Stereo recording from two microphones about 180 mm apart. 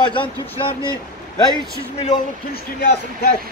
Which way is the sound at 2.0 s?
50° left (ahead or behind).